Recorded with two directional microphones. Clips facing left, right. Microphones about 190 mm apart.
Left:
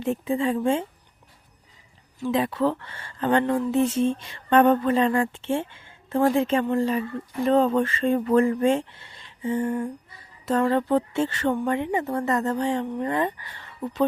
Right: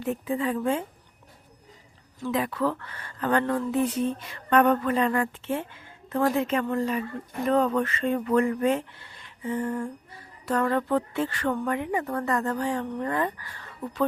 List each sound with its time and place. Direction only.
0.0 s speech: 25° left (ahead or behind)
2.2 s speech: 25° left (ahead or behind)